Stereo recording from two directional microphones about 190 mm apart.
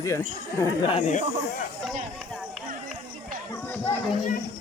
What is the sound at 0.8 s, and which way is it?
Speech, 25° left (ahead or behind).